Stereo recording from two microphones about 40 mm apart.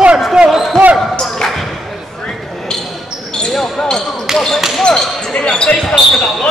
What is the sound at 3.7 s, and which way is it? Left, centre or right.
Speech, centre.